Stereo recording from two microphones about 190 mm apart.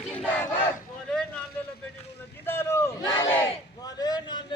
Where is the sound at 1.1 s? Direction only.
5° left (ahead or behind).